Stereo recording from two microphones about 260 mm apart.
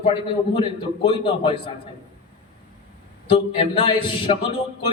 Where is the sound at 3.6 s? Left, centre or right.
Centre.